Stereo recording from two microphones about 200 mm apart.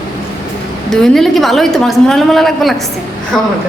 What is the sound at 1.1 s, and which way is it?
A woman's voice, centre (ahead or behind).